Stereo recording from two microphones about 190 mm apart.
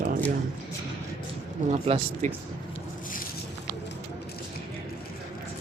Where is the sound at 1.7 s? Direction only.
35° right (ahead or behind).